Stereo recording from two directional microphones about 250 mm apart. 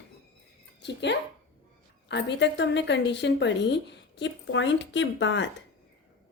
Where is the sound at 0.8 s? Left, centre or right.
Left.